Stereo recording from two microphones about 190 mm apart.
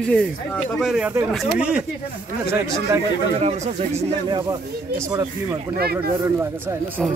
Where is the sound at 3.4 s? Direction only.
35° right (ahead or behind).